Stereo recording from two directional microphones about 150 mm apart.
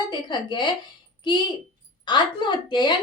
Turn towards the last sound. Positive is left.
turn(degrees=30)  # may be behind; listen again after turning